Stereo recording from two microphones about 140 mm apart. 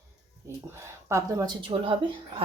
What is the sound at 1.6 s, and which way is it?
Speech, 40° right (ahead or behind).